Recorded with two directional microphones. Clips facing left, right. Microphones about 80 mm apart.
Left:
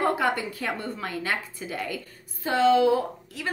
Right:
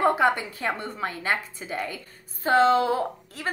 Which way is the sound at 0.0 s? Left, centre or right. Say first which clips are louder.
Right 3 dB; right.